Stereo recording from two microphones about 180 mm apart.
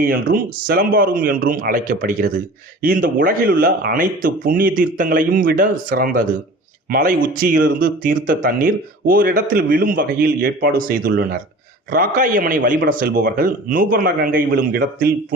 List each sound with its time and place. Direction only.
0.0 s speech: 55° right (ahead or behind)